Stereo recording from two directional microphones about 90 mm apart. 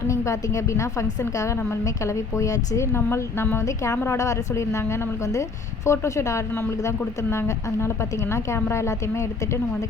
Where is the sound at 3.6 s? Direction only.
35° left (ahead or behind).